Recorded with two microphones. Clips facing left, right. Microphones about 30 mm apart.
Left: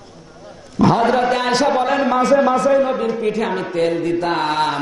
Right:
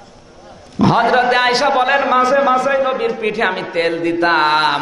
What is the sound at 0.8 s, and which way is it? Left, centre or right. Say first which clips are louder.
A man's voice: right 2 dB; right.